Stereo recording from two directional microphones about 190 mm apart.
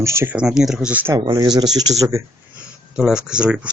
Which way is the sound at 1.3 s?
20° right (ahead or behind).